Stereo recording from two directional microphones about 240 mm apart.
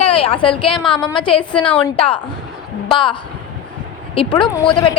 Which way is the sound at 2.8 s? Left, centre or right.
Centre.